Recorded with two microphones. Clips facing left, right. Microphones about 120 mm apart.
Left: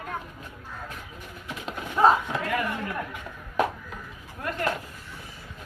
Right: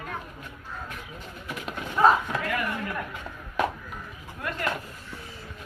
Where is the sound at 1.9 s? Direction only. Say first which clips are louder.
Even; 15° left (ahead or behind).